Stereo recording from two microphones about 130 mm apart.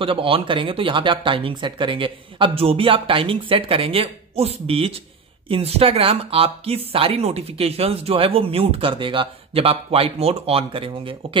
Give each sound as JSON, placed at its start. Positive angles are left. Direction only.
{"t": 0.0, "sound": "speech", "side_deg": -45}